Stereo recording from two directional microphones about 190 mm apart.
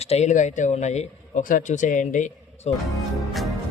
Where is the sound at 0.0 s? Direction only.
35° left (ahead or behind).